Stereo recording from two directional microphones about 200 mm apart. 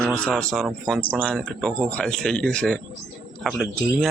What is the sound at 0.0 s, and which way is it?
Speech, 5° left (ahead or behind).